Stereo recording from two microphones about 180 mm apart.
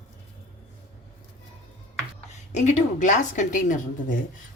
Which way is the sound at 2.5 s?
40° left (ahead or behind).